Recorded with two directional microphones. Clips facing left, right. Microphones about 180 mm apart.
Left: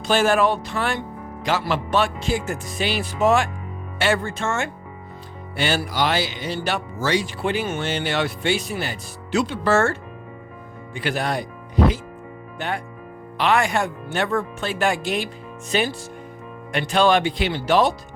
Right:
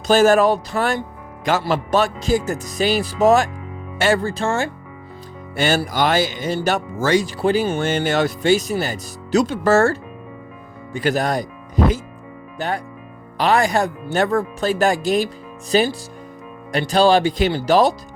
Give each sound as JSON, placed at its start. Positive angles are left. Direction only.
{"t": 0.1, "sound": "speech", "side_deg": -40}
{"t": 5.5, "sound": "speech", "side_deg": -45}
{"t": 12.5, "sound": "speech", "side_deg": -40}